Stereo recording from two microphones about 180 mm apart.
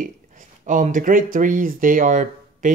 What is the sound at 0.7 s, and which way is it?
Speech, 45° right (ahead or behind).